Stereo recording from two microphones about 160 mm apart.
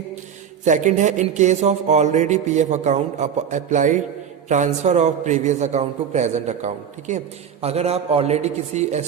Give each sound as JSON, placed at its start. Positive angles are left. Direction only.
{"t": 0.6, "sound": "a man's voice", "side_deg": -50}